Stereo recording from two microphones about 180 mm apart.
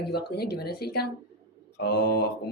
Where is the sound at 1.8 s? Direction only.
70° left (ahead or behind).